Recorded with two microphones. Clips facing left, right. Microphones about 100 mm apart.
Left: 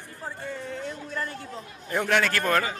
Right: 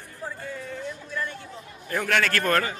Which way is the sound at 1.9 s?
20° left (ahead or behind).